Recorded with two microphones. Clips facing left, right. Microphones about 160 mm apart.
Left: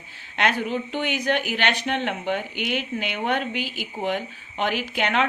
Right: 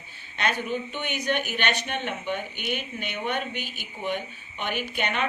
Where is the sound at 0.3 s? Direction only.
90° left.